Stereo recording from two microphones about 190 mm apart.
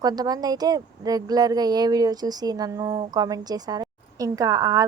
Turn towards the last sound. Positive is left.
turn(degrees=-20)  # may be behind; listen again after turning